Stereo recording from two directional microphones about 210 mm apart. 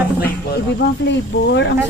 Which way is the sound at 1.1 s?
55° left (ahead or behind).